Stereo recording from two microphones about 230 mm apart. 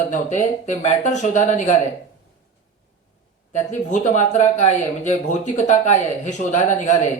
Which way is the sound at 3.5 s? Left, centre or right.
Left.